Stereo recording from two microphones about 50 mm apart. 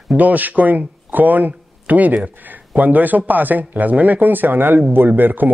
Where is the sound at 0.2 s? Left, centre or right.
Right.